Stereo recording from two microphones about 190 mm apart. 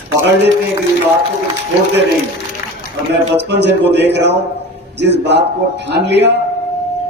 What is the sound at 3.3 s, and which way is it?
A man's voice, 65° right (ahead or behind).